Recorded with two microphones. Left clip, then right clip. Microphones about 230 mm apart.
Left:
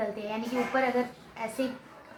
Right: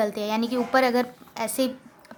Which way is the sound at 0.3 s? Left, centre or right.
Right.